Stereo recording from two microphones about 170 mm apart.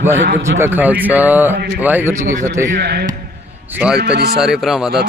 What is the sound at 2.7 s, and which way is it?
A man's voice, 70° right (ahead or behind).